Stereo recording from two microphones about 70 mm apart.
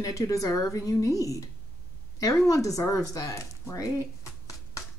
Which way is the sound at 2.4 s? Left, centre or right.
Left.